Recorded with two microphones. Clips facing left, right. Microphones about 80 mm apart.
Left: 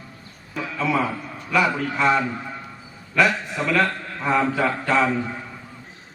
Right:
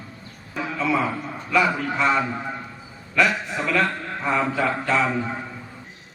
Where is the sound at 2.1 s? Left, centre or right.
Right.